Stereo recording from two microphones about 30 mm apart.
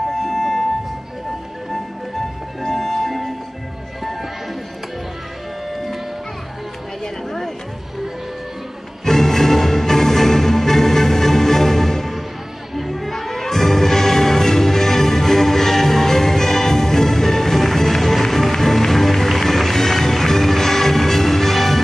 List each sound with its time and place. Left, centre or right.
0.1 s music: centre
2.7 s music: centre
5.7 s music: centre
9.0 s music: centre